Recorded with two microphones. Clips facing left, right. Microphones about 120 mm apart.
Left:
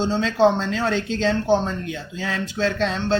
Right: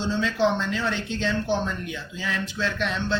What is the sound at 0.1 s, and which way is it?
Speech, 90° left.